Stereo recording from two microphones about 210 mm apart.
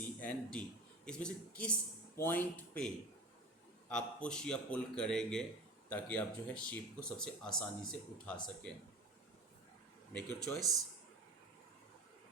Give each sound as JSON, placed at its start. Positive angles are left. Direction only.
{"t": 0.0, "sound": "a sound", "side_deg": 5}
{"t": 1.0, "sound": "speech", "side_deg": 5}
{"t": 10.1, "sound": "speech", "side_deg": 10}